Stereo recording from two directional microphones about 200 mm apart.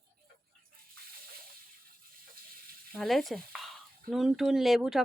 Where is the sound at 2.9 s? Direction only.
Centre (ahead or behind).